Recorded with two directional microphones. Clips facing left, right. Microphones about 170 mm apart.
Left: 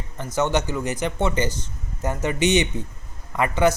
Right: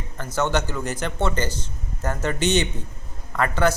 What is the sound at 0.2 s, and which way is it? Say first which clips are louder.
A man's voice: left 1 dB; 15° left (ahead or behind).